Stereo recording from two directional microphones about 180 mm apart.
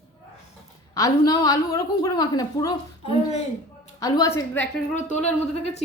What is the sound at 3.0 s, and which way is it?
Speech, 35° left (ahead or behind).